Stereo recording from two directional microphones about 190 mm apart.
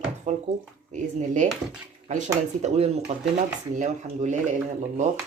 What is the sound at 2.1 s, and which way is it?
Speech, 40° right (ahead or behind).